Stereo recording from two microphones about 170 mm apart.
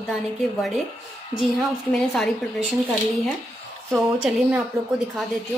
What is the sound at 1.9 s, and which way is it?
Speech, 5° left (ahead or behind).